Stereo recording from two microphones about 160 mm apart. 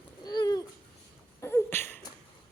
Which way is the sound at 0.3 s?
25° left (ahead or behind).